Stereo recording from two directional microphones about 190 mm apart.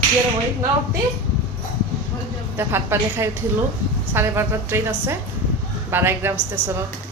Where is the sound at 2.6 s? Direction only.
10° right (ahead or behind).